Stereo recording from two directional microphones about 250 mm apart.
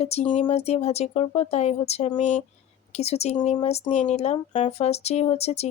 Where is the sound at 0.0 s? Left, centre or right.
Left.